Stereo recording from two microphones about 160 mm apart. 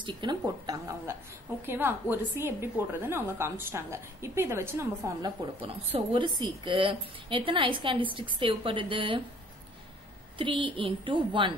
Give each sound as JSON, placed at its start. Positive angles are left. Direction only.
{"t": 0.0, "sound": "a woman's voice", "side_deg": -30}
{"t": 10.3, "sound": "a woman's voice", "side_deg": -30}